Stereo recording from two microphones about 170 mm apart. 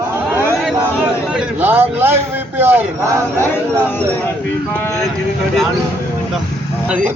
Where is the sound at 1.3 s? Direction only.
10° right (ahead or behind).